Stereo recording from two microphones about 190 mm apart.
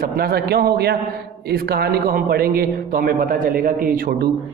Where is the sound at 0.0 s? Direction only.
55° right (ahead or behind).